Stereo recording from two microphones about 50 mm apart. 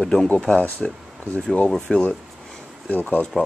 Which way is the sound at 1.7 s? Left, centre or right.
Centre.